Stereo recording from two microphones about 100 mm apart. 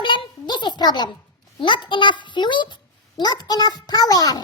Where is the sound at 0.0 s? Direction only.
55° left (ahead or behind).